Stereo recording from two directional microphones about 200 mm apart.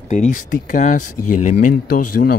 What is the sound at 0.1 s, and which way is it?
Speech, 35° left (ahead or behind).